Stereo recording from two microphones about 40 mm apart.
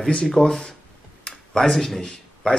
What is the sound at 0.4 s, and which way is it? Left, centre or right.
Speech, centre.